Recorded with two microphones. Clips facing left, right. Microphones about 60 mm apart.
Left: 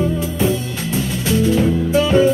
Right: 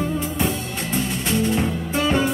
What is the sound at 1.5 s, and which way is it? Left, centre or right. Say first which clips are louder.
Music: left 7 dB; right.